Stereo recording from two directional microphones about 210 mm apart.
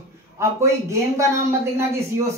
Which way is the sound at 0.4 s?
15° right (ahead or behind).